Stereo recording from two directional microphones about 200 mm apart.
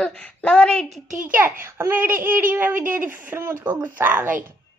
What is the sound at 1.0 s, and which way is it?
Speech, 40° right (ahead or behind).